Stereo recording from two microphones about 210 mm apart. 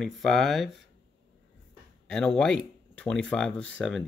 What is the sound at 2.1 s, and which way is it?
Speech, 5° left (ahead or behind).